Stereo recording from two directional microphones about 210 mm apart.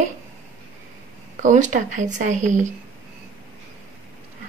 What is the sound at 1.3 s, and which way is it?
A woman's voice, 35° right (ahead or behind).